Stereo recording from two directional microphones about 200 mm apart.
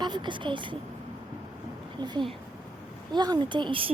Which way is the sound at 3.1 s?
20° right (ahead or behind).